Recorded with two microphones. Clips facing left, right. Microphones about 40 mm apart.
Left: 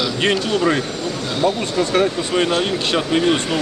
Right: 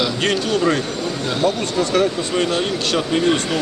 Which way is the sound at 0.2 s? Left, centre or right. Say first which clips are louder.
Left 1 dB; centre.